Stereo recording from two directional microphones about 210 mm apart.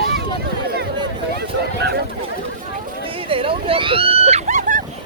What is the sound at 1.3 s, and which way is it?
Speech, 50° right (ahead or behind).